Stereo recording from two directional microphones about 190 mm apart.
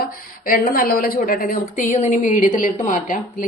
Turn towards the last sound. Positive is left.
turn(degrees=45)  # may be behind; listen again after turning